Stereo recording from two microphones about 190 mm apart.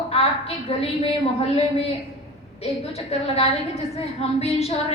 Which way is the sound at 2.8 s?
30° left (ahead or behind).